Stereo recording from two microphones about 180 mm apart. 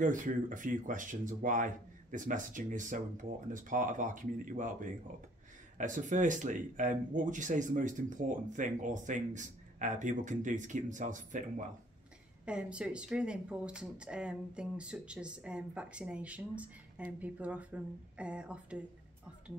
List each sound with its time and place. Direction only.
0.0 s speech: 45° right (ahead or behind)
12.4 s speech: 5° right (ahead or behind)